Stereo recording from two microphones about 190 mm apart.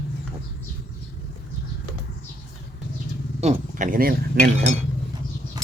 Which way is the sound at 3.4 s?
40° right (ahead or behind).